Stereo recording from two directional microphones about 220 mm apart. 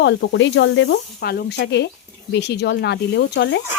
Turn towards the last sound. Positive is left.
turn(degrees=55)  # may be behind; listen again after turning